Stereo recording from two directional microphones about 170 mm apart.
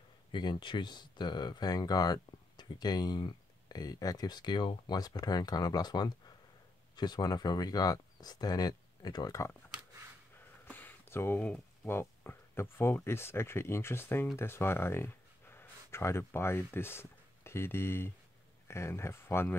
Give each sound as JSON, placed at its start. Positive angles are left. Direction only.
{"t": 0.3, "sound": "speech", "side_deg": 25}
{"t": 10.7, "sound": "speech", "side_deg": 10}